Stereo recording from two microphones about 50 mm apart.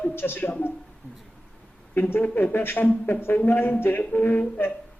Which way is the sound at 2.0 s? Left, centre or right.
Left.